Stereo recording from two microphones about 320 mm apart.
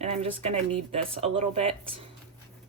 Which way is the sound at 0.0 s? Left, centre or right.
Centre.